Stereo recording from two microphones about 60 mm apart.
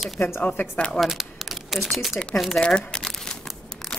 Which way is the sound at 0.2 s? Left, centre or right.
Left.